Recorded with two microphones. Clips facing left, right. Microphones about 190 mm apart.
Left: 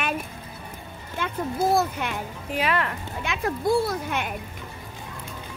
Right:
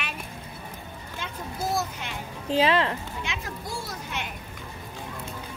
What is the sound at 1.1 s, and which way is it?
A child's voice, 55° left (ahead or behind).